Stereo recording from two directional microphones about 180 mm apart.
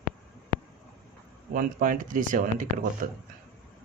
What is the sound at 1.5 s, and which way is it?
Speech, 50° right (ahead or behind).